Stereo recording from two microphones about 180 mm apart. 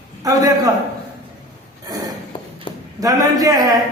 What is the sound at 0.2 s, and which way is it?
Speech, 20° right (ahead or behind).